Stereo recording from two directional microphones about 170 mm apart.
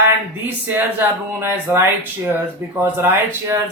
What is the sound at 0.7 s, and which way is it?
Speech, 10° right (ahead or behind).